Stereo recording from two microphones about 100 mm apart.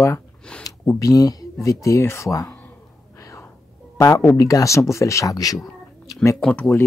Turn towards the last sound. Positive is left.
turn(degrees=15)  # may be behind; listen again after turning